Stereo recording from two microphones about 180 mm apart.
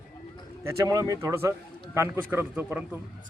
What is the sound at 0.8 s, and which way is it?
A man's voice, 20° right (ahead or behind).